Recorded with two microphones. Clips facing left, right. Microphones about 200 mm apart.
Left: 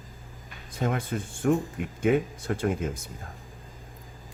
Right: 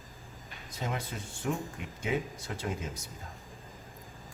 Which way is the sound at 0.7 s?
55° left (ahead or behind).